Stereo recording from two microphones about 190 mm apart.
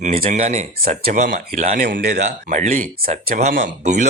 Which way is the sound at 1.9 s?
60° right (ahead or behind).